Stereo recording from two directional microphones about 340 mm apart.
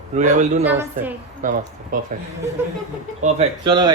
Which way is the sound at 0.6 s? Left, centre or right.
Centre.